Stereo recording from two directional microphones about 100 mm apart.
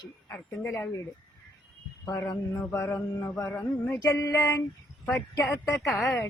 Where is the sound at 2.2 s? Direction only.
25° left (ahead or behind).